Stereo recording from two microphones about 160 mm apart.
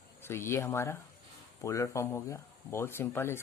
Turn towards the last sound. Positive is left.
turn(degrees=15)  # may be behind; listen again after turning